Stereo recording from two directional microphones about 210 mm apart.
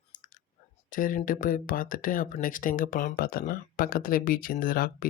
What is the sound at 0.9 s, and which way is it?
Speech, 40° left (ahead or behind).